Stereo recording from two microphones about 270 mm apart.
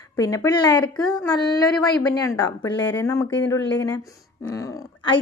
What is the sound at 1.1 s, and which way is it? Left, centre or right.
Speech, centre.